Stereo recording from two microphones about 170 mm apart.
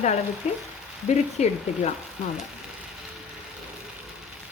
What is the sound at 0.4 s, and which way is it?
Speech, 40° left (ahead or behind).